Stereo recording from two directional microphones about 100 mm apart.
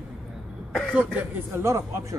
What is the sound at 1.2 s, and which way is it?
Speech, 25° right (ahead or behind).